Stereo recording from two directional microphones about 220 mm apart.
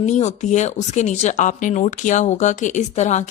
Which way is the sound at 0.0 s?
30° left (ahead or behind).